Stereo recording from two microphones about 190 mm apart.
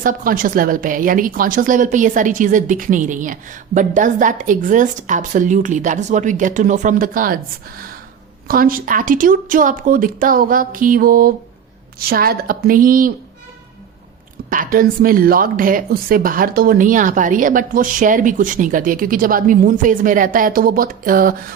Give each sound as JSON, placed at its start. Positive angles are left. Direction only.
{"t": 0.0, "sound": "a woman's voice", "side_deg": -45}
{"t": 8.4, "sound": "a woman's voice", "side_deg": -50}
{"t": 14.5, "sound": "a woman's voice", "side_deg": -45}